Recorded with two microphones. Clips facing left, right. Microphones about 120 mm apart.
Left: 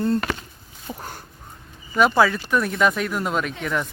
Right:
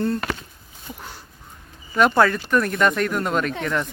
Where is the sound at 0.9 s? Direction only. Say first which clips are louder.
Left 3 dB; 50° left (ahead or behind).